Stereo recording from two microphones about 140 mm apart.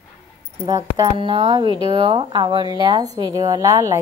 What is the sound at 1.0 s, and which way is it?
Speech, 40° right (ahead or behind).